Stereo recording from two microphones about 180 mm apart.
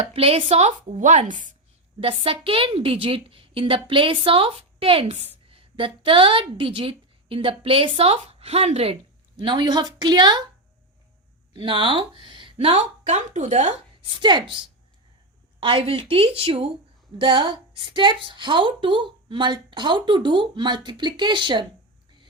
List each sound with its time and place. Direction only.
0.0 s a woman's voice: 30° right (ahead or behind)
2.0 s a woman's voice: 30° right (ahead or behind)
11.5 s speech: 25° right (ahead or behind)
14.1 s a woman's voice: 25° right (ahead or behind)
15.6 s a woman's voice: 30° right (ahead or behind)